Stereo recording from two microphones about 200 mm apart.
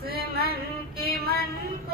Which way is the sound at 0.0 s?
50° right (ahead or behind).